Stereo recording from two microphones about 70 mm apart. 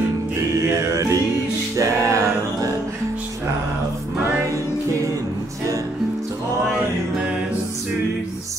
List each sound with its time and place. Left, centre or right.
0.6 s music: right